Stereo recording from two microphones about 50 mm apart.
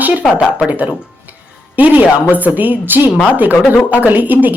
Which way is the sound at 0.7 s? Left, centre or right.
Right.